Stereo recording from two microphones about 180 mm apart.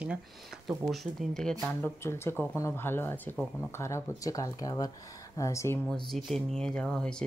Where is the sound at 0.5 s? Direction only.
Centre (ahead or behind).